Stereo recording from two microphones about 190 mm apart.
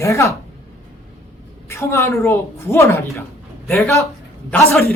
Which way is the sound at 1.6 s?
15° left (ahead or behind).